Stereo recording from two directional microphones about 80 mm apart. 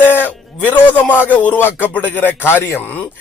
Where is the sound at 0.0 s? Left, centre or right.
Left.